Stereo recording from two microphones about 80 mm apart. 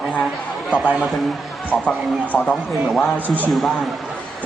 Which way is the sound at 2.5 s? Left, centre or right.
Centre.